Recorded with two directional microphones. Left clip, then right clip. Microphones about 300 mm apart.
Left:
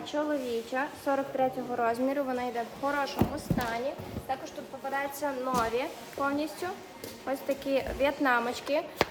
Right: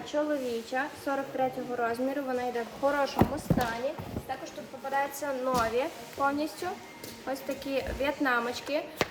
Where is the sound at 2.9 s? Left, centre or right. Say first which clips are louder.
Even; centre.